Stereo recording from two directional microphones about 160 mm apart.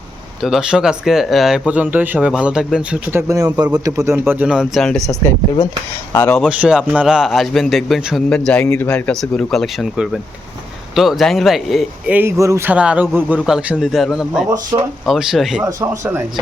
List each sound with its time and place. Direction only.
0.4 s speech: 5° right (ahead or behind)
3.1 s speech: 15° right (ahead or behind)
4.3 s speech: 10° right (ahead or behind)
6.1 s speech: 10° left (ahead or behind)
6.4 s speech: 5° right (ahead or behind)
15.6 s speech: 15° right (ahead or behind)